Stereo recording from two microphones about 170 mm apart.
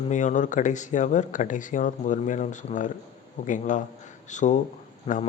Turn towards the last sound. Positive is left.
turn(degrees=35)  # may be behind; listen again after turning